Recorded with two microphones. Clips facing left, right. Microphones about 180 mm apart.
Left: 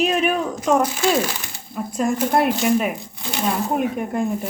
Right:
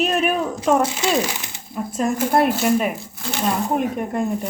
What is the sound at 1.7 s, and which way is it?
Speech, centre (ahead or behind).